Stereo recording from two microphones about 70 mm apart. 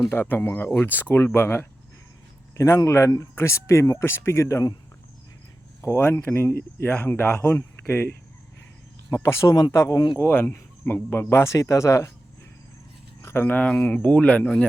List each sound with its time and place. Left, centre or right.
0.1 s speech: left
2.6 s speech: left
5.8 s speech: left
6.8 s speech: centre
7.4 s speech: left
9.0 s speech: left
10.2 s speech: left
13.3 s speech: left
13.6 s speech: left